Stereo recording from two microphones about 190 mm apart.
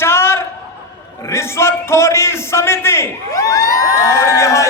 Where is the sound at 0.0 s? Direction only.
15° left (ahead or behind).